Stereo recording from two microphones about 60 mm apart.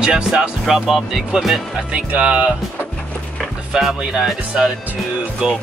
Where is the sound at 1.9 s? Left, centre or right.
Centre.